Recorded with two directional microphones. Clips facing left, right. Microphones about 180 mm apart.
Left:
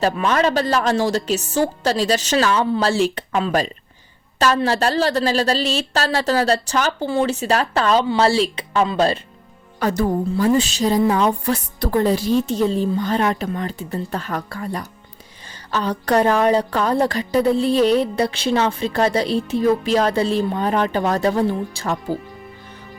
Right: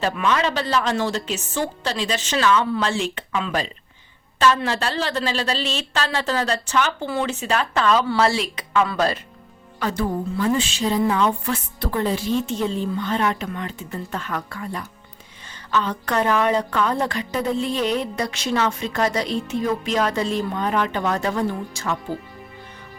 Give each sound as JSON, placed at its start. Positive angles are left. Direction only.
{"t": 0.0, "sound": "a woman's voice", "side_deg": 40}
{"t": 9.8, "sound": "a woman's voice", "side_deg": 40}